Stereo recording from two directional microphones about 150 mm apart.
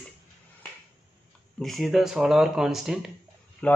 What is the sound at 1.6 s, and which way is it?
Speech, centre (ahead or behind).